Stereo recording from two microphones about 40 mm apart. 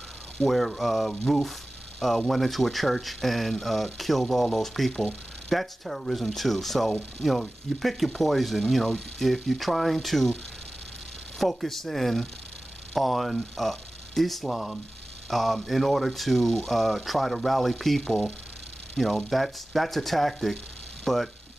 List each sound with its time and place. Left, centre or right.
0.4 s speech: centre
11.3 s speech: centre
21.0 s a sound: centre